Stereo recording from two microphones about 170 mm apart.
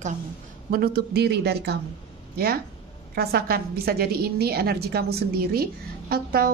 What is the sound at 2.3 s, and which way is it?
Speech, 65° right (ahead or behind).